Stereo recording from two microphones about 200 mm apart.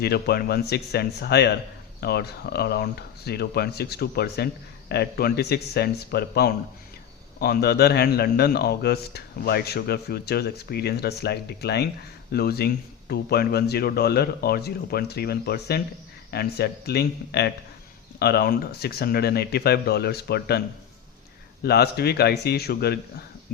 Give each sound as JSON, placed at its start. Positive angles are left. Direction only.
{"t": 0.0, "sound": "speech", "side_deg": 50}
{"t": 21.6, "sound": "speech", "side_deg": 55}